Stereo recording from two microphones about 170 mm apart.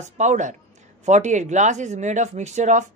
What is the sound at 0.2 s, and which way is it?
A woman's voice, 45° right (ahead or behind).